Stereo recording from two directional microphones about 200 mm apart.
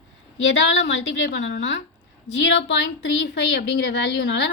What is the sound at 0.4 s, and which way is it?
A woman's voice, 65° left (ahead or behind).